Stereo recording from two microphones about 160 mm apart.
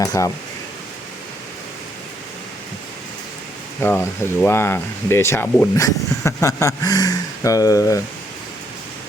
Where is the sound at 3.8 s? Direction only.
15° left (ahead or behind).